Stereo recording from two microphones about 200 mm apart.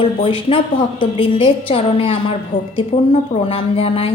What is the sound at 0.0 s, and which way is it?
Speech, 25° left (ahead or behind).